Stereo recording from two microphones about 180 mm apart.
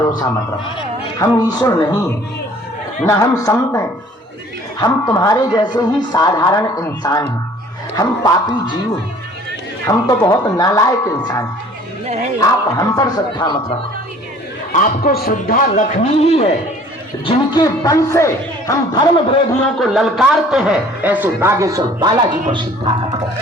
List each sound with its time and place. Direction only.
0.8 s speech: 20° left (ahead or behind)
3.1 s speech: 15° left (ahead or behind)
9.8 s speech: 20° left (ahead or behind)
14.7 s a man's voice: 50° left (ahead or behind)
17.2 s speech: 20° left (ahead or behind)
19.8 s a man's voice: centre (ahead or behind); by 22.1 s 20° right (ahead or behind)